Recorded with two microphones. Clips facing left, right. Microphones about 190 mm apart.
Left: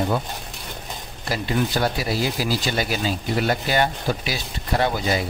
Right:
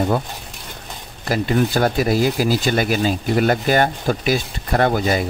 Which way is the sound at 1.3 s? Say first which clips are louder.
Right 5 dB; 50° right (ahead or behind).